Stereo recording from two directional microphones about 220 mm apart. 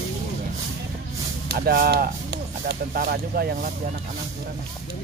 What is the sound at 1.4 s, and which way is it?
Speech, 45° right (ahead or behind).